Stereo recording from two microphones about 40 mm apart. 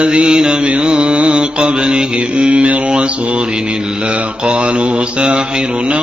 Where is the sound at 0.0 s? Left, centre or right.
Right.